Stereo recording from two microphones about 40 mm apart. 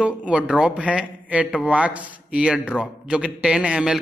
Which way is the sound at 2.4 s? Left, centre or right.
Right.